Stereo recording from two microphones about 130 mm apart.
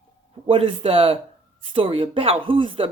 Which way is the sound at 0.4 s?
45° right (ahead or behind).